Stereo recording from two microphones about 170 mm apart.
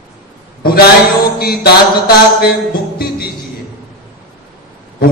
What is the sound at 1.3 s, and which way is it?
Mantra, 70° left (ahead or behind).